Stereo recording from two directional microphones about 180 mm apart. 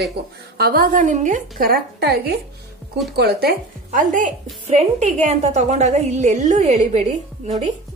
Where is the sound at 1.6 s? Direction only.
60° right (ahead or behind).